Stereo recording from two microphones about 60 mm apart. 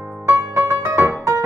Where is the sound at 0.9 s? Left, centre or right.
Right.